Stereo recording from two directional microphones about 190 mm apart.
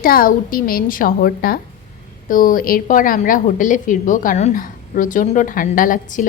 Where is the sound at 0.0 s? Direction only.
50° left (ahead or behind).